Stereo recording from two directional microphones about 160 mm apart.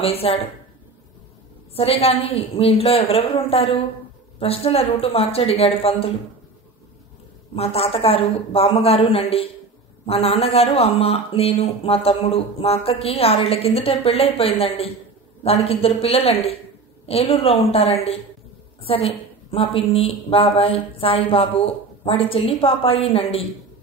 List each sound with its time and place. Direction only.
0.0 s a woman's voice: 35° left (ahead or behind)
1.8 s a woman's voice: 40° left (ahead or behind)
7.5 s a woman's voice: 40° left (ahead or behind)